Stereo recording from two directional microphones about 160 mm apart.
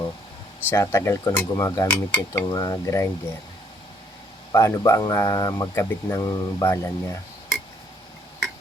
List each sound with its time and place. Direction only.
0.7 s speech: 15° left (ahead or behind)
4.5 s speech: 20° left (ahead or behind)